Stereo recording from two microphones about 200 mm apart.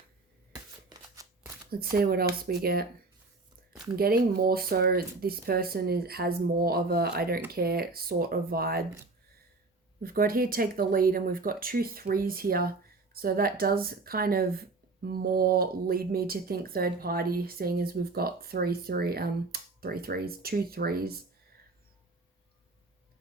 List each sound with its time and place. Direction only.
0.5 s shuffling cards: 15° right (ahead or behind)
1.7 s speech: 50° right (ahead or behind)
3.9 s speech: 50° right (ahead or behind)
10.0 s speech: 45° right (ahead or behind)